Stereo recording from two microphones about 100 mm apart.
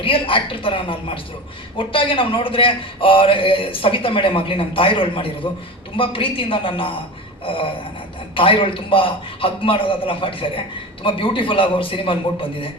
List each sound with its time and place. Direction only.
0.0 s a man's voice: 65° left (ahead or behind)